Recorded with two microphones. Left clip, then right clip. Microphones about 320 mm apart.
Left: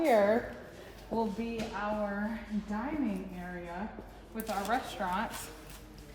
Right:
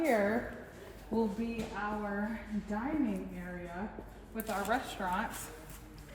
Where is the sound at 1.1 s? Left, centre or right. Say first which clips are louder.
Left 1 dB; centre.